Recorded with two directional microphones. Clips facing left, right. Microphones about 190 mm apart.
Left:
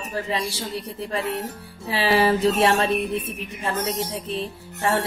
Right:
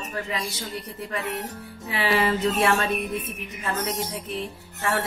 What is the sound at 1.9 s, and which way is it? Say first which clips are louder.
A woman's voice: left 4 dB; 30° left (ahead or behind).